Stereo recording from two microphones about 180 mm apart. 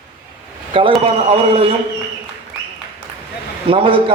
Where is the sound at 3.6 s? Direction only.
30° right (ahead or behind).